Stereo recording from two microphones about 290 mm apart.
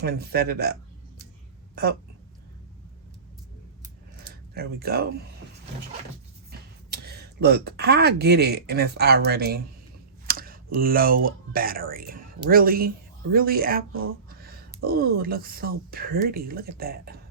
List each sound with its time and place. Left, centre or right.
0.0 s speech: right
4.5 s speech: right
6.9 s speech: right
14.3 s a sound: right
14.8 s speech: right